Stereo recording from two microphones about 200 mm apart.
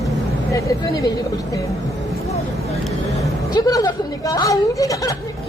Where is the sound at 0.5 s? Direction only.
15° left (ahead or behind).